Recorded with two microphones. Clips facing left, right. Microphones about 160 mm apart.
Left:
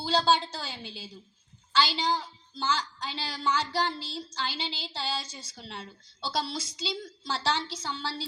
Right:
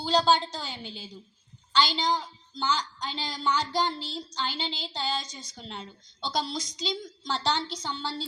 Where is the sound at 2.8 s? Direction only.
10° left (ahead or behind).